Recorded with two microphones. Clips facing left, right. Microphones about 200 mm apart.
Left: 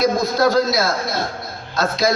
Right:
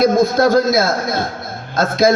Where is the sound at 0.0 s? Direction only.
50° right (ahead or behind).